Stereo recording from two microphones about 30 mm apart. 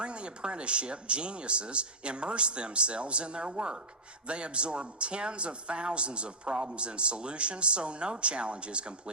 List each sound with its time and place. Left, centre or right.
0.0 s speech: right